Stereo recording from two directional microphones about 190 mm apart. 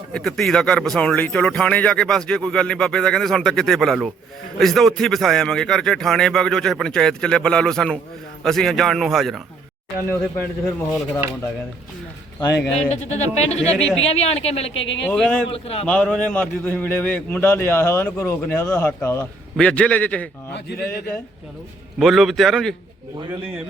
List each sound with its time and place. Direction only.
0.1 s a man's voice: centre (ahead or behind)
10.1 s a man's voice: 10° left (ahead or behind)
12.9 s speech: 35° left (ahead or behind)
14.7 s speech: 80° left
15.0 s a man's voice: 5° left (ahead or behind)
15.4 s speech: 30° left (ahead or behind)
15.9 s a man's voice: 5° left (ahead or behind)
20.7 s speech: 55° left (ahead or behind)
21.9 s a man's voice: centre (ahead or behind)